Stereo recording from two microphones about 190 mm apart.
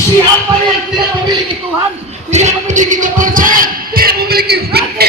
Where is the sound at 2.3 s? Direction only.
40° right (ahead or behind); by 5.1 s 55° right (ahead or behind).